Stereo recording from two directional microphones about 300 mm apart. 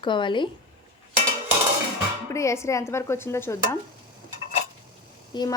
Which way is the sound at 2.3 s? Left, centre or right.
Centre.